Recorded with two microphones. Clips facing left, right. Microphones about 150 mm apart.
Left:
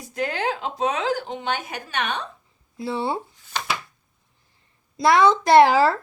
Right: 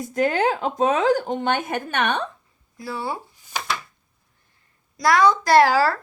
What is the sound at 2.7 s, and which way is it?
Speech, 25° left (ahead or behind).